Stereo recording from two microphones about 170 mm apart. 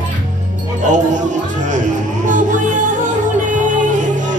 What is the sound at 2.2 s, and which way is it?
Music, 50° right (ahead or behind).